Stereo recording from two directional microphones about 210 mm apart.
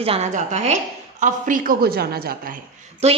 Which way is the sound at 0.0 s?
30° right (ahead or behind).